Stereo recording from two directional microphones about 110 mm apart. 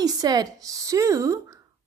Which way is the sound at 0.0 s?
35° right (ahead or behind).